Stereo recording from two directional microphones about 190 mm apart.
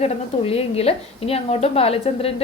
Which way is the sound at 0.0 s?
30° left (ahead or behind).